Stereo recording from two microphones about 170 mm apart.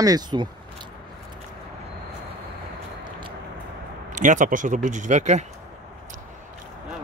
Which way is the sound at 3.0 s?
30° right (ahead or behind).